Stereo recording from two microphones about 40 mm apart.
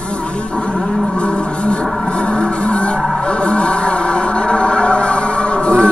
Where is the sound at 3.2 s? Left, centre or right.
Left.